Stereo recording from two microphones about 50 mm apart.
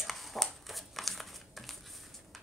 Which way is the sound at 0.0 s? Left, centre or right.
Centre.